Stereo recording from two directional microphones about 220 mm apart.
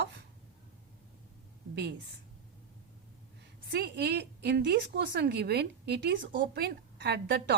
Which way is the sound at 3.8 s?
50° right (ahead or behind).